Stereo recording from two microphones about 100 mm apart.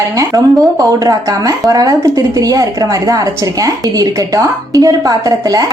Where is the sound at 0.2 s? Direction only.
35° right (ahead or behind).